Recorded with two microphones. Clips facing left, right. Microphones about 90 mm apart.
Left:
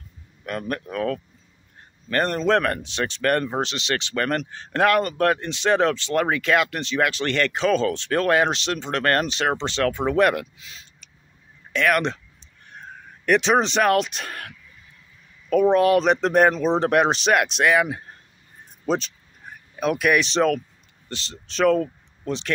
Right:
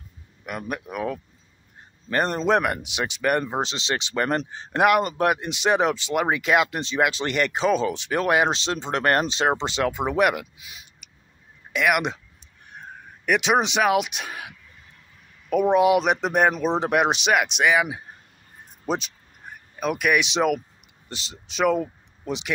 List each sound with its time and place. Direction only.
0.5 s speech: 10° right (ahead or behind)
13.2 s speech: 5° right (ahead or behind)
15.5 s speech: 10° right (ahead or behind)